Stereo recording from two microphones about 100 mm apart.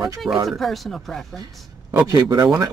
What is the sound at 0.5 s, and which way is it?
Speech, centre (ahead or behind).